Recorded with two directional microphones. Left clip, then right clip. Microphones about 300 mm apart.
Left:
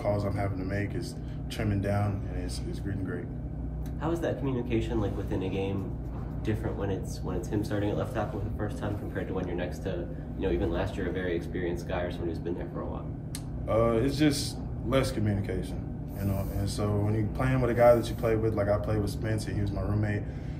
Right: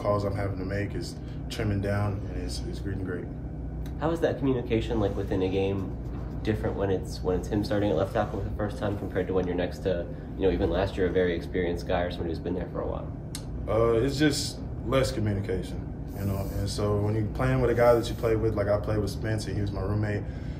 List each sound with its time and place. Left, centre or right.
0.0 s speech: centre
4.0 s speech: right
6.4 s speech: right
13.7 s speech: centre